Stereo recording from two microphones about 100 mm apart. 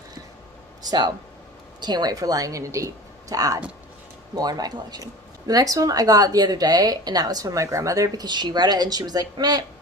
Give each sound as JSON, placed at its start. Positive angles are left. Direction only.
{"t": 0.9, "sound": "a woman's voice", "side_deg": -45}